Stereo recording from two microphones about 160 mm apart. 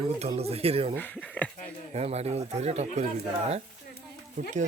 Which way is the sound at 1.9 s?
40° right (ahead or behind).